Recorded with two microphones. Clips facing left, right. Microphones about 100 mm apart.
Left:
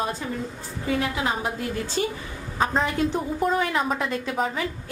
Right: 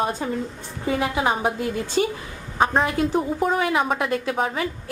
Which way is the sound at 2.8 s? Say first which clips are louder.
Right 3 dB; 5° right (ahead or behind).